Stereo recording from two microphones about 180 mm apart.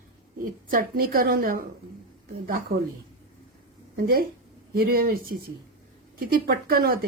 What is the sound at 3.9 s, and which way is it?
Speech, 55° right (ahead or behind).